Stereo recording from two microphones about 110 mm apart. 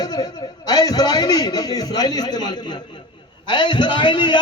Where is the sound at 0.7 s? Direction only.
35° left (ahead or behind).